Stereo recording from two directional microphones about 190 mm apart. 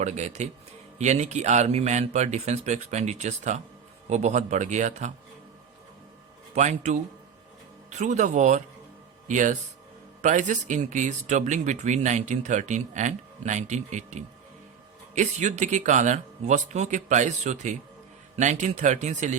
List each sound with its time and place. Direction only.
0.0 s speech: 35° right (ahead or behind)
6.5 s speech: 35° right (ahead or behind)